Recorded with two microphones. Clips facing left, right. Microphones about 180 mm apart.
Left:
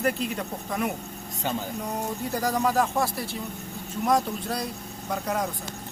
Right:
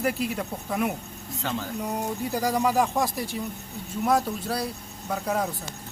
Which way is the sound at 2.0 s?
10° right (ahead or behind).